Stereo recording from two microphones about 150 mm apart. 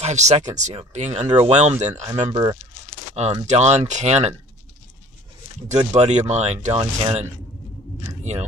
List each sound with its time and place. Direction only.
0.0 s speech: 50° right (ahead or behind)
2.0 s speech: 25° right (ahead or behind)
3.2 s speech: 45° right (ahead or behind)
5.7 s speech: 45° right (ahead or behind)